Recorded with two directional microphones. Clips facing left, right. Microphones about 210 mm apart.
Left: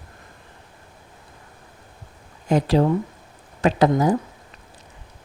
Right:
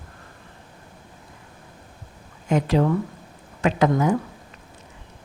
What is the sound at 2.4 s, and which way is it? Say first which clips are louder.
Speech: left 2 dB; 35° left (ahead or behind).